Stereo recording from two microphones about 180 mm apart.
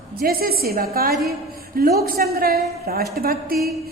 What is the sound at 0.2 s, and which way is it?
A woman's voice, 55° right (ahead or behind).